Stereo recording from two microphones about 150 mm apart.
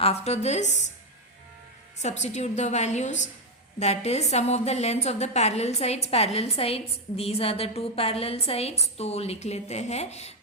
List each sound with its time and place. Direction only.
0.0 s a woman's voice: 45° left (ahead or behind)
2.0 s a woman's voice: 50° left (ahead or behind)